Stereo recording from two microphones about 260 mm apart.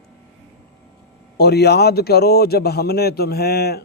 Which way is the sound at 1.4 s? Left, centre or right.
Left.